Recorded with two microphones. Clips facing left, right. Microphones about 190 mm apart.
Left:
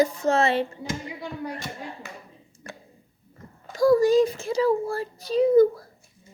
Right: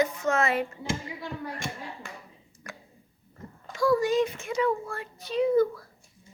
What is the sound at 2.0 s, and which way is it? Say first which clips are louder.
Finger snapping: left 2 dB; 5° left (ahead or behind).